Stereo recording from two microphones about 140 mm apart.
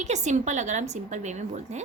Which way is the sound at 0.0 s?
55° right (ahead or behind).